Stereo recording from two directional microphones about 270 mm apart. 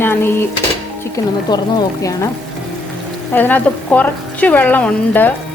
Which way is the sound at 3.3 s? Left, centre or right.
Centre.